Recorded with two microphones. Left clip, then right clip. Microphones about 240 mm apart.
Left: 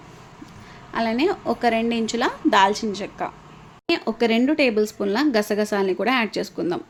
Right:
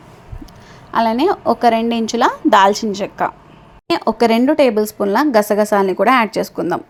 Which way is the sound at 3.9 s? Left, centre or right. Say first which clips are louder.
Right 7 dB; right.